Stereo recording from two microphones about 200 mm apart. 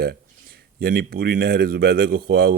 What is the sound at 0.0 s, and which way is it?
Speech, 50° right (ahead or behind).